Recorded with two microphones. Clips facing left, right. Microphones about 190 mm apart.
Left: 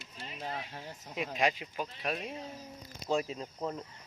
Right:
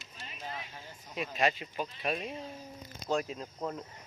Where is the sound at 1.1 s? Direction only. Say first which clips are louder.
Even; 15° left (ahead or behind).